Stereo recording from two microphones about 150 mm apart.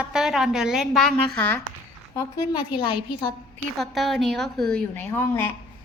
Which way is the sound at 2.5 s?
35° left (ahead or behind).